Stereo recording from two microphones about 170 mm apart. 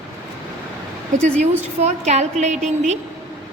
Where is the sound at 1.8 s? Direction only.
40° right (ahead or behind).